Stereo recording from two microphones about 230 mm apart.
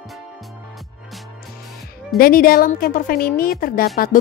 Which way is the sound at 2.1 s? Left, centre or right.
Left.